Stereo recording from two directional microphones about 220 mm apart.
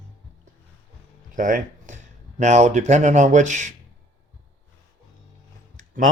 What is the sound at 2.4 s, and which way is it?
Speech, 30° right (ahead or behind).